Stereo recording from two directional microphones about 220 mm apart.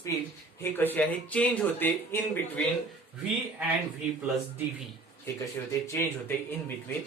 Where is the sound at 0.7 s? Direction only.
10° left (ahead or behind).